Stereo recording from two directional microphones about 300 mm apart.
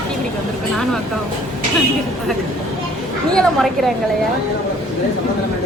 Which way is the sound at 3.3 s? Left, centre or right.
Centre.